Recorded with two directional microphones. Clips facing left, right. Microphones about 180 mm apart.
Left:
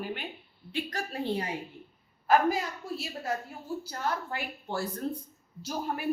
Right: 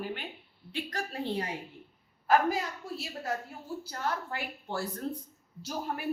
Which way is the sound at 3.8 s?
15° left (ahead or behind).